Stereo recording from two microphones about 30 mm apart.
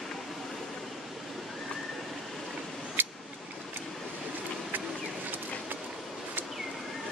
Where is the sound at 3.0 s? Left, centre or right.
Right.